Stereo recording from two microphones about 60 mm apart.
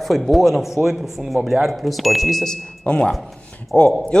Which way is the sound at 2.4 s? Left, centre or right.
Centre.